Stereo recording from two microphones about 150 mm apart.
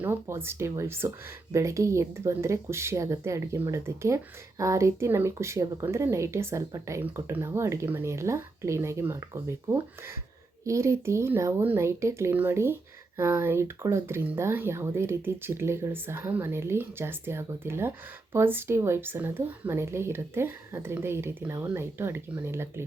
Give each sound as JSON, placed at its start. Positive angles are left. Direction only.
{"t": 0.0, "sound": "speech", "side_deg": -15}